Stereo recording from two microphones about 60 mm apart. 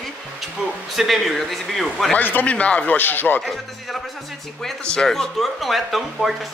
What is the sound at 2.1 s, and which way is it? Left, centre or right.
Speech, left.